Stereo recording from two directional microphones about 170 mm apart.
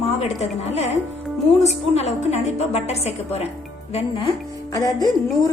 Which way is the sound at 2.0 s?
40° left (ahead or behind).